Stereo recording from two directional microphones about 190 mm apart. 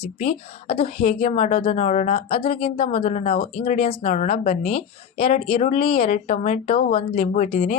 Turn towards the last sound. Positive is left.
turn(degrees=30)  # may be behind; listen again after turning